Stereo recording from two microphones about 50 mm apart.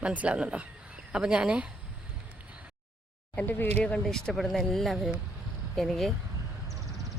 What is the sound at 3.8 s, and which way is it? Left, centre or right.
Speech, left.